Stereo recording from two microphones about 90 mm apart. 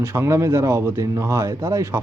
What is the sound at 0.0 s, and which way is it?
A man's voice, 30° right (ahead or behind).